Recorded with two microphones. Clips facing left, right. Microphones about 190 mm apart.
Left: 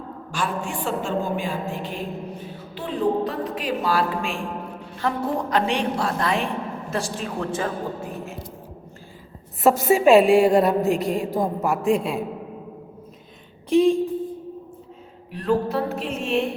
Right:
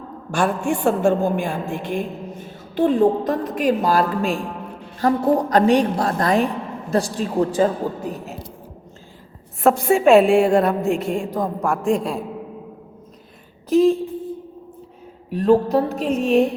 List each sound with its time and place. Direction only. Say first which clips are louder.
0.3 s a woman's voice: right 8 dB; 50° right (ahead or behind)
9.6 s a woman's voice: right 1 dB; centre (ahead or behind)
13.7 s speech: right 2 dB; centre (ahead or behind)
15.3 s a woman's voice: right 7 dB; 40° right (ahead or behind)